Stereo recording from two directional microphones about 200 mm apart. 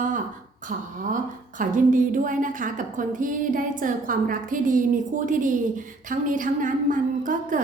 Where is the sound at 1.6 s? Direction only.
40° right (ahead or behind).